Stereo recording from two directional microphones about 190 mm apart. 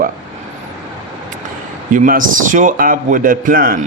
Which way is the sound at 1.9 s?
45° right (ahead or behind).